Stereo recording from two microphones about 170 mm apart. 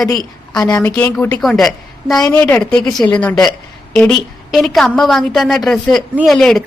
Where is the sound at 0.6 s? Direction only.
20° left (ahead or behind).